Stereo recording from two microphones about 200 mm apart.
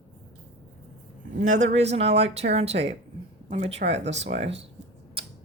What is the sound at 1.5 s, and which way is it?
A woman's voice, 35° right (ahead or behind).